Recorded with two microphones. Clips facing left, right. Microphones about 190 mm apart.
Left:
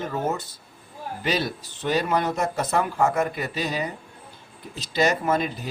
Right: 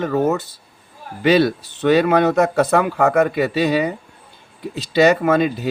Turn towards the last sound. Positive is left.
turn(degrees=-70)  # may be behind; listen again after turning